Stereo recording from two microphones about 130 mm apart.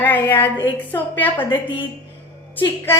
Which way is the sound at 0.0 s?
15° left (ahead or behind).